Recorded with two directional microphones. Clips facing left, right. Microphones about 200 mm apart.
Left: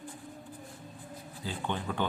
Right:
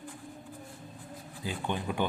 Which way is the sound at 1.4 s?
15° right (ahead or behind).